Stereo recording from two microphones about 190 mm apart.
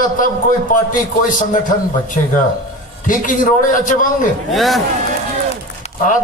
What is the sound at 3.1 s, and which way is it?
A man's voice, 45° left (ahead or behind).